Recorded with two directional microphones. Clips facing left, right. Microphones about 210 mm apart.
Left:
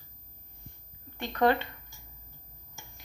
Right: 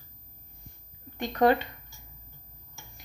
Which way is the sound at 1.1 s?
15° right (ahead or behind).